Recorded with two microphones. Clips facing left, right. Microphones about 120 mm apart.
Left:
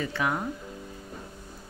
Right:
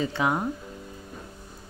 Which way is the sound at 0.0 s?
20° right (ahead or behind).